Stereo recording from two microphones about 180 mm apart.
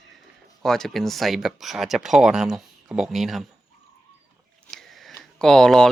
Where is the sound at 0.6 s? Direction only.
Centre (ahead or behind).